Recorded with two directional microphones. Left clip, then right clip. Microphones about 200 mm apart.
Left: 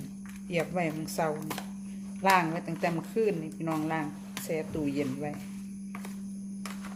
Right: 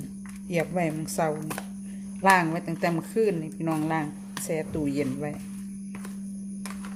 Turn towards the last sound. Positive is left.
turn(degrees=-15)  # may be behind; listen again after turning